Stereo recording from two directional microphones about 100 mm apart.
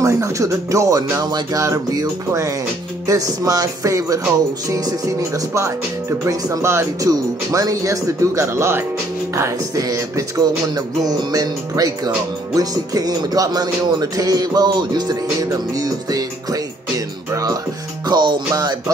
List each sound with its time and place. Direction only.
0.0 s speech: 30° right (ahead or behind)
17.3 s music: 35° right (ahead or behind)